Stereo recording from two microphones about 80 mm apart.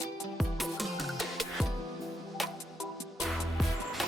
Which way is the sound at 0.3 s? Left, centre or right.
Centre.